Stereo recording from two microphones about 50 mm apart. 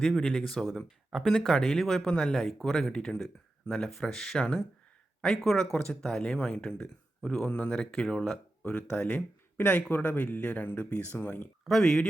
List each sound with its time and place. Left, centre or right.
0.2 s speech: centre
2.0 s speech: centre
2.9 s speech: centre
4.4 s speech: centre
5.4 s speech: centre
5.7 s speech: centre
6.3 s speech: left
7.4 s speech: left
7.8 s speech: centre
9.1 s speech: left
11.8 s speech: centre